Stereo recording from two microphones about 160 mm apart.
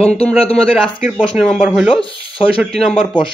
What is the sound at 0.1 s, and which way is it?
Speech, 40° left (ahead or behind).